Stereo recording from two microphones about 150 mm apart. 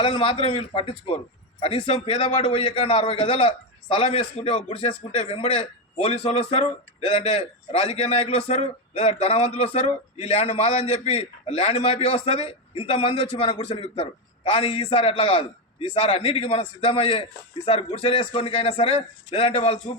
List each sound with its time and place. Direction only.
0.0 s a man's voice: 35° left (ahead or behind)